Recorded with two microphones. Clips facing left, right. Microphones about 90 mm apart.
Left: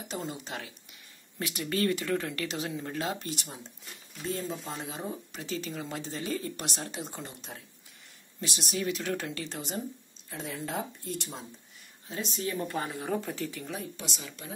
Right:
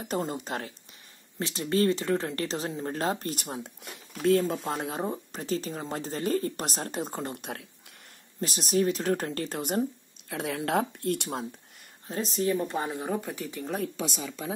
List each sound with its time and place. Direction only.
0.0 s speech: 45° right (ahead or behind)
1.4 s speech: 30° right (ahead or behind); by 3.9 s 55° right (ahead or behind)
3.9 s speech: 70° right (ahead or behind)
8.4 s speech: 40° right (ahead or behind)
10.3 s speech: 70° right (ahead or behind)
12.1 s speech: 40° right (ahead or behind)
12.4 s speech: 25° right (ahead or behind)